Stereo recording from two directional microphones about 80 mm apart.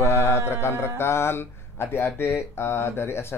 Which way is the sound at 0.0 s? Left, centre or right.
Left.